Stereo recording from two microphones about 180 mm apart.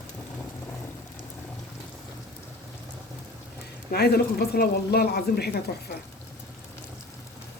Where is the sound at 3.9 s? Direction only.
60° left (ahead or behind).